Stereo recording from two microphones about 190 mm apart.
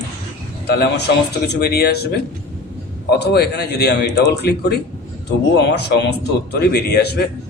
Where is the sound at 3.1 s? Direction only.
60° left (ahead or behind).